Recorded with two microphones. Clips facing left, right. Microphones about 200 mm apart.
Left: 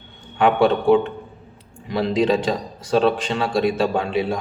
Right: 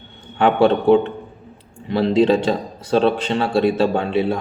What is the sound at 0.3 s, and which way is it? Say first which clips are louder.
Speech: right 2 dB; 30° right (ahead or behind).